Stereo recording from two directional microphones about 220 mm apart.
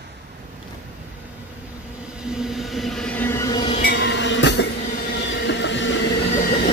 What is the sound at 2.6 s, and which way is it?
Vehicle, centre (ahead or behind).